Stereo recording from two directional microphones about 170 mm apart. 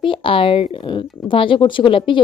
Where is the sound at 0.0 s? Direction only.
30° left (ahead or behind).